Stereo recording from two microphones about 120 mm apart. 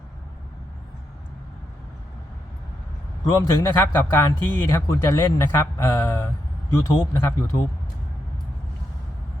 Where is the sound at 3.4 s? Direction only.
15° left (ahead or behind).